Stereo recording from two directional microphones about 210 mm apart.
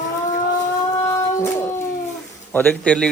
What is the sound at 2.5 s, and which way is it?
Speech, 10° left (ahead or behind).